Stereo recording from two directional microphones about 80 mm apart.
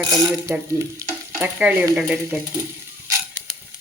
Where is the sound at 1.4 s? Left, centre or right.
Right.